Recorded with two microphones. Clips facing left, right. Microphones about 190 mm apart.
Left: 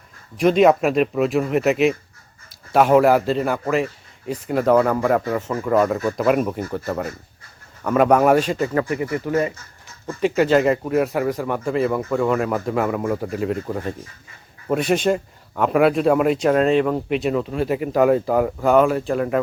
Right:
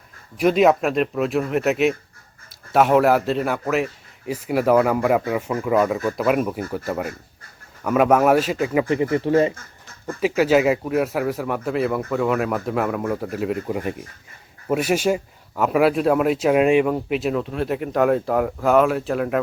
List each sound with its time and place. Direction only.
0.3 s speech: 5° right (ahead or behind)
8.9 s speech: 25° right (ahead or behind)
10.1 s speech: 5° right (ahead or behind)